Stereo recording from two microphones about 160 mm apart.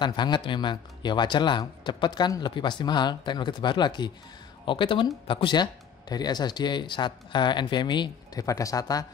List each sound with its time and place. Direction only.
0.0 s speech: 30° left (ahead or behind)